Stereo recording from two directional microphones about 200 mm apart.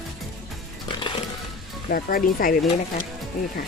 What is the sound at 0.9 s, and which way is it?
Music, 25° left (ahead or behind).